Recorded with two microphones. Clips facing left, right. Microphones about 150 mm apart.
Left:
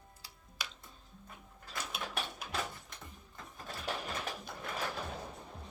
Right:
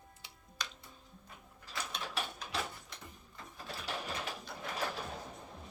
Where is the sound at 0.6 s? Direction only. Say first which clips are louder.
Right 1 dB; 10° left (ahead or behind).